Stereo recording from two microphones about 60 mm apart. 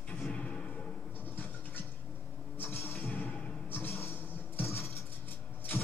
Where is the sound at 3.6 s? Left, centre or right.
Left.